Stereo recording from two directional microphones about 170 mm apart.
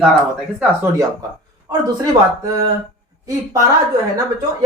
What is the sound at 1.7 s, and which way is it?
Speech, 15° right (ahead or behind).